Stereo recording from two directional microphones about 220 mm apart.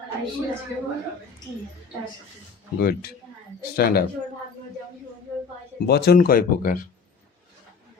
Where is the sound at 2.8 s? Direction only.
45° left (ahead or behind).